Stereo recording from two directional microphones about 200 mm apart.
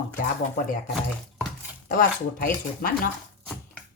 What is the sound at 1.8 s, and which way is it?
Speech, 45° left (ahead or behind).